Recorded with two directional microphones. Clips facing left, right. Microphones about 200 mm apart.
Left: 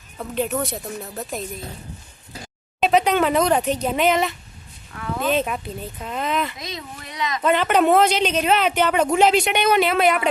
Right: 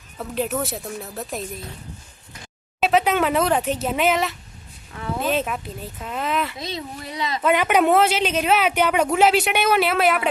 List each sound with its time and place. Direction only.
0.2 s speech: centre (ahead or behind)
2.8 s speech: 5° right (ahead or behind)
6.6 s speech: 30° right (ahead or behind)
7.4 s speech: 10° right (ahead or behind)